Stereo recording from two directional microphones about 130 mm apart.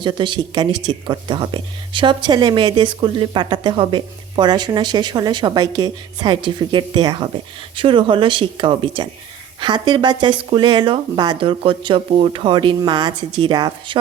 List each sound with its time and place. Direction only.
0.0 s speech: 35° right (ahead or behind)